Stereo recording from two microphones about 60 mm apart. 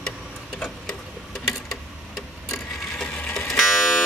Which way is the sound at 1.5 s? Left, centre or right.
Centre.